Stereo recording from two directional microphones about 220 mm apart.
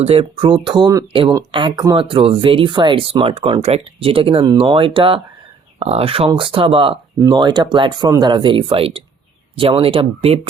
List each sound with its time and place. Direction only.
0.0 s speech: 25° right (ahead or behind)